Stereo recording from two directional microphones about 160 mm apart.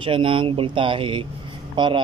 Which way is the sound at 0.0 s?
30° right (ahead or behind).